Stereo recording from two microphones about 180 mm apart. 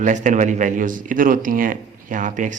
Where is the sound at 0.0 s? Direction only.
45° right (ahead or behind).